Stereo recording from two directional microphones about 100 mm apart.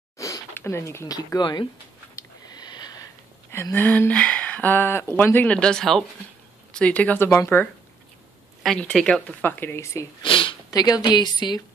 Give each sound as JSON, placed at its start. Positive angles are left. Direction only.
{"t": 0.2, "sound": "a sound", "side_deg": 30}
{"t": 1.4, "sound": "a woman's voice", "side_deg": 50}
{"t": 2.4, "sound": "sniff", "side_deg": 45}
{"t": 3.7, "sound": "speech", "side_deg": 20}
{"t": 9.4, "sound": "speech", "side_deg": 20}
{"t": 10.2, "sound": "a sound", "side_deg": 60}
{"t": 10.7, "sound": "a woman's voice", "side_deg": 40}